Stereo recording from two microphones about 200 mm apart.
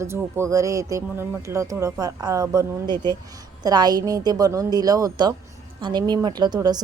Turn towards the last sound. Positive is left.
turn(degrees=-20)  # may be behind; listen again after turning